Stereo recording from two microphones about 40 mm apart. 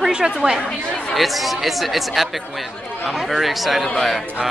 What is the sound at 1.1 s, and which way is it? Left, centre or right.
Speech, centre.